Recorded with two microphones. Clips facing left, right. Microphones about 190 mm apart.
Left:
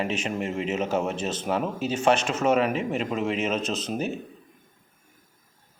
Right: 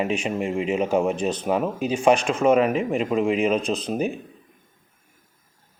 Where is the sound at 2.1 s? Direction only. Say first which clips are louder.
Right 4 dB; 35° right (ahead or behind).